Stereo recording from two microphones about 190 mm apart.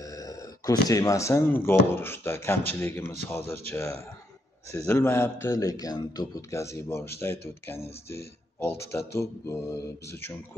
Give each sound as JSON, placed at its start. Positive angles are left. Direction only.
{"t": 0.0, "sound": "a man's voice", "side_deg": 20}
{"t": 4.7, "sound": "a man's voice", "side_deg": 10}